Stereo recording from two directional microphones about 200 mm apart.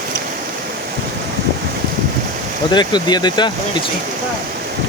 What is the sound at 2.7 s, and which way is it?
Speech, 20° left (ahead or behind).